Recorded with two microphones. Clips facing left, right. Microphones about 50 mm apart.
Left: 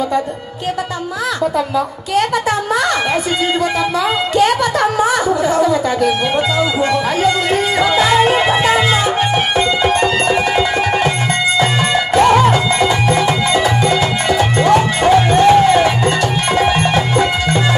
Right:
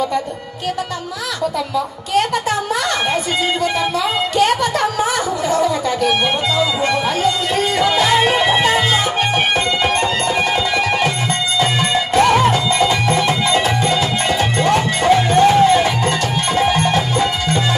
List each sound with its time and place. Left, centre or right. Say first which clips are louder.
4.4 s speech: left 2 dB; left
6.8 s speech: left 2 dB; left
7.8 s music: left 2 dB; left
12.1 s music: left 3 dB; left